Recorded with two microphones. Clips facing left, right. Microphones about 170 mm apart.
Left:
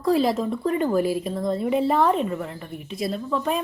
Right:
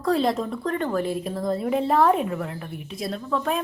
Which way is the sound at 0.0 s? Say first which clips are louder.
Left 2 dB; 5° left (ahead or behind).